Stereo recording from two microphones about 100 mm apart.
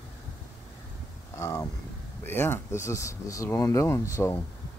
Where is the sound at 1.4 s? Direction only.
30° left (ahead or behind).